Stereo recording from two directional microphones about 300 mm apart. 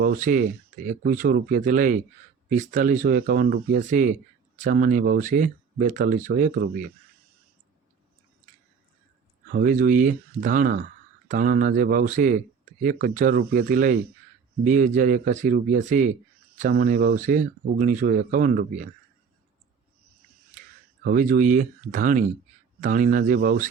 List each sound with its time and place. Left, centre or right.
0.0 s speech: right
9.5 s speech: right
21.0 s speech: right